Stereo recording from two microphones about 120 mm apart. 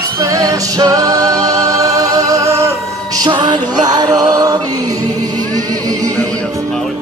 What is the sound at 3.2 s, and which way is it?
Music, 35° right (ahead or behind).